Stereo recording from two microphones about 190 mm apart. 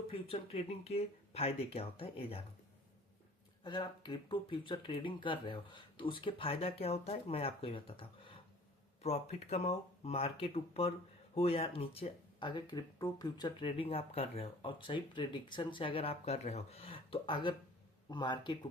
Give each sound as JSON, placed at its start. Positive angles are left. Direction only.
{"t": 0.1, "sound": "speech", "side_deg": 30}
{"t": 3.6, "sound": "speech", "side_deg": 25}